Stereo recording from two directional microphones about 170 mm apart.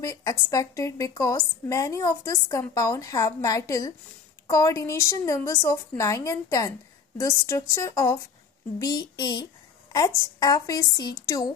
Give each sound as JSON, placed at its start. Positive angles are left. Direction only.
{"t": 0.0, "sound": "a woman's voice", "side_deg": 20}